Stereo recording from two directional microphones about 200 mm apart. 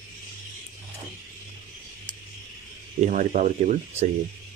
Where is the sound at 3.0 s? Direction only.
40° right (ahead or behind).